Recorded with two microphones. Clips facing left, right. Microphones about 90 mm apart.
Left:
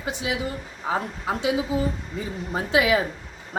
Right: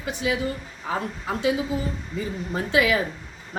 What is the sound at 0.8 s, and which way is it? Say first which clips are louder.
A woman's voice: left 2 dB; 20° left (ahead or behind).